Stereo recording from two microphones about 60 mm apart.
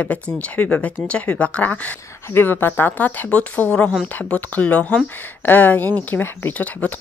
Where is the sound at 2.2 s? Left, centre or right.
Left.